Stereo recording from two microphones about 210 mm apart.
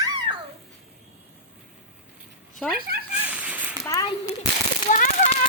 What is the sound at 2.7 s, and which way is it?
Speech, 45° right (ahead or behind).